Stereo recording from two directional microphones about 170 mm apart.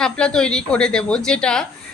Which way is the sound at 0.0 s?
5° left (ahead or behind).